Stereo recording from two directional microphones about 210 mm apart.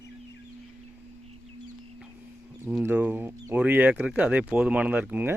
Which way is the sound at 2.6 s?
10° right (ahead or behind).